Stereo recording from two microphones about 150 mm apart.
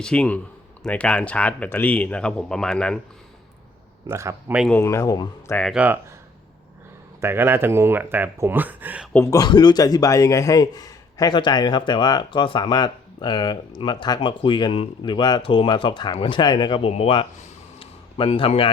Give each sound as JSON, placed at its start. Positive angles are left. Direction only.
{"t": 0.0, "sound": "speech", "side_deg": 5}
{"t": 4.0, "sound": "speech", "side_deg": -20}
{"t": 4.7, "sound": "a man's voice", "side_deg": 20}
{"t": 5.5, "sound": "speech", "side_deg": 10}
{"t": 5.7, "sound": "speech", "side_deg": -10}
{"t": 7.2, "sound": "speech", "side_deg": -15}
{"t": 9.2, "sound": "a man's voice", "side_deg": 25}